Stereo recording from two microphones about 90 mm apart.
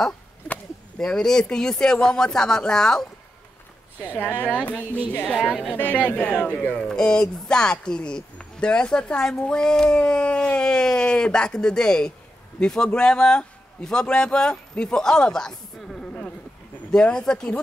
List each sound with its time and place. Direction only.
0.5 s speech: 10° left (ahead or behind)
5.8 s speech: 20° right (ahead or behind)
6.1 s speech: 15° left (ahead or behind)
6.8 s speech: 10° left (ahead or behind)